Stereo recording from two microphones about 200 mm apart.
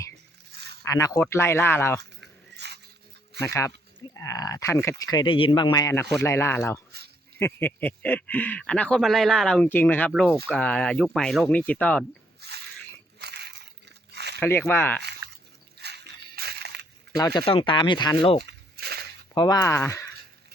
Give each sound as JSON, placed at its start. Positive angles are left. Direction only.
{"t": 0.9, "sound": "speech", "side_deg": 15}
{"t": 2.0, "sound": "dog", "side_deg": -55}
{"t": 3.4, "sound": "speech", "side_deg": 15}
{"t": 5.1, "sound": "speech", "side_deg": 25}
{"t": 6.9, "sound": "a sound", "side_deg": -55}
{"t": 7.3, "sound": "speech", "side_deg": 10}
{"t": 10.1, "sound": "speech", "side_deg": -5}
{"t": 12.4, "sound": "a sound", "side_deg": -55}
{"t": 13.1, "sound": "crumpling", "side_deg": -55}
{"t": 14.3, "sound": "speech", "side_deg": 10}
{"t": 15.8, "sound": "a sound", "side_deg": -55}
{"t": 17.2, "sound": "speech", "side_deg": 20}
{"t": 18.4, "sound": "a sound", "side_deg": -55}
{"t": 19.3, "sound": "speech", "side_deg": 20}